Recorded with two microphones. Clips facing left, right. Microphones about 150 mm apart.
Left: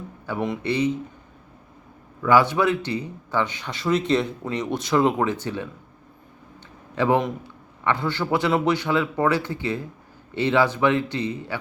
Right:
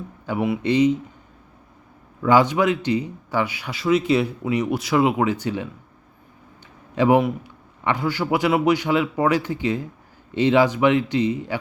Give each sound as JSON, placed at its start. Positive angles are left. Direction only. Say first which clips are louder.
{"t": 0.3, "sound": "speech", "louder": "right 4 dB", "side_deg": -10}
{"t": 2.2, "sound": "speech", "louder": "right 1 dB", "side_deg": -20}
{"t": 6.9, "sound": "speech", "louder": "right 4 dB", "side_deg": -15}